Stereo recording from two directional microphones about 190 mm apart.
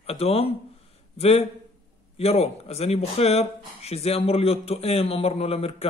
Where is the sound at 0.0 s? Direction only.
30° left (ahead or behind).